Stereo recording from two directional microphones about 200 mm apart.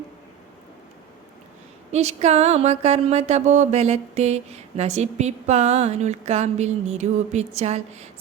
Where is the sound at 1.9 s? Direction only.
35° right (ahead or behind).